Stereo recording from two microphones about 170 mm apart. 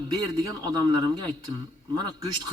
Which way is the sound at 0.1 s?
25° right (ahead or behind).